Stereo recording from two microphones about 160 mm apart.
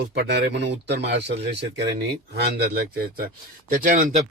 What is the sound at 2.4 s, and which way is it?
Speech, 80° right.